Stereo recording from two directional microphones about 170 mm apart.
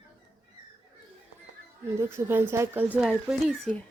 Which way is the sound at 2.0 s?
15° right (ahead or behind).